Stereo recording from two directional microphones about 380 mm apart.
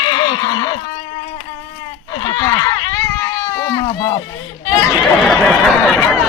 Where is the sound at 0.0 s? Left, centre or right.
Centre.